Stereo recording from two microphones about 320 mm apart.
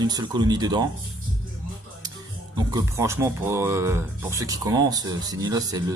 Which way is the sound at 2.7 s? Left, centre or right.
Centre.